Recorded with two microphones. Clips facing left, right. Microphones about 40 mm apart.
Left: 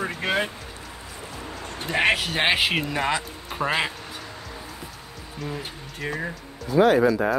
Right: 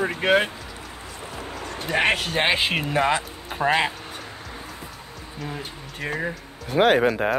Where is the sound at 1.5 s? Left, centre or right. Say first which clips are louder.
Right 2 dB; right.